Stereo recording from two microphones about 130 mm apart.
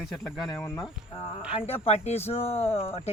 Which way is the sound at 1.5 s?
50° left (ahead or behind).